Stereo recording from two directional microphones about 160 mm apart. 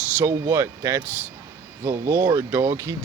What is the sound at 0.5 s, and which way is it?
Speech, 20° right (ahead or behind).